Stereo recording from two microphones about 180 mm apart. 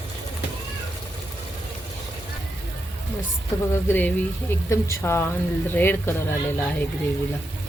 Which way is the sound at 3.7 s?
10° left (ahead or behind).